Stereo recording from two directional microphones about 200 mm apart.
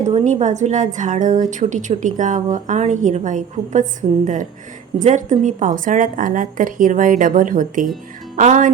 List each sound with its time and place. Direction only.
0.1 s a woman's voice: 35° right (ahead or behind)
4.9 s a woman's voice: 40° right (ahead or behind)